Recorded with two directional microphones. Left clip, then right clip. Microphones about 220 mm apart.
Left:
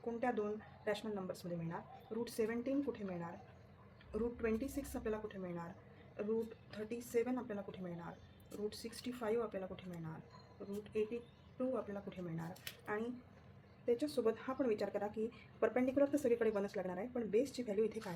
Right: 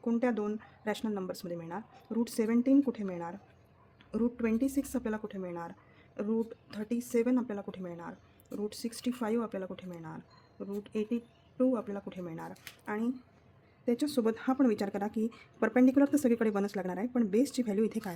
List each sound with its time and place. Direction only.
0.0 s a woman's voice: 55° right (ahead or behind)